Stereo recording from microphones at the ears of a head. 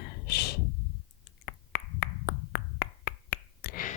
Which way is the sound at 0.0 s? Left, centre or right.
Left.